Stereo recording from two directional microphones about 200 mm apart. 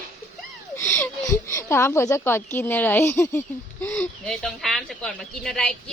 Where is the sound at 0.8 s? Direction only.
10° left (ahead or behind).